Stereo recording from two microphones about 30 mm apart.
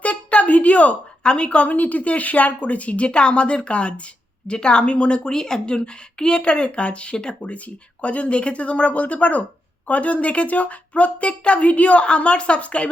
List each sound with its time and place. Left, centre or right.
0.0 s a sound: left
1.2 s speech: left
1.6 s speech: left
3.1 s speech: left
5.3 s speech: centre
5.6 s speech: left
7.4 s speech: left
12.0 s speech: left